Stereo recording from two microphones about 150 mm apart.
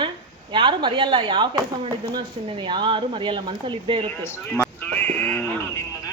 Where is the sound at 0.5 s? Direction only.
30° right (ahead or behind).